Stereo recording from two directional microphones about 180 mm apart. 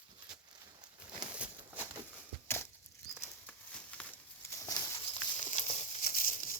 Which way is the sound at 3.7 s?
5° left (ahead or behind).